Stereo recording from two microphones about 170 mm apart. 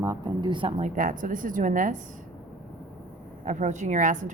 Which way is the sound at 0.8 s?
50° right (ahead or behind).